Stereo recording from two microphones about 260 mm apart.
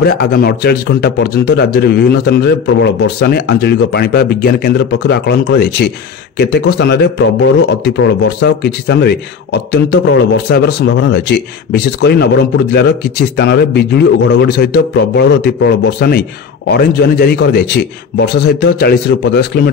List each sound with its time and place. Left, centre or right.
0.0 s speech: left